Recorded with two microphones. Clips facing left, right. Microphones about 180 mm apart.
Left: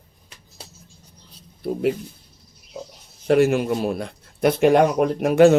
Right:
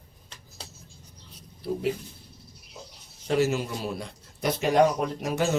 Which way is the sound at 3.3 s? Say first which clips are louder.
Left 8 dB; 60° left (ahead or behind).